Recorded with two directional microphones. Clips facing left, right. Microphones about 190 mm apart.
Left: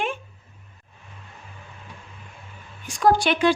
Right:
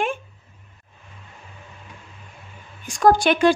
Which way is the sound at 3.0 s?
45° right (ahead or behind).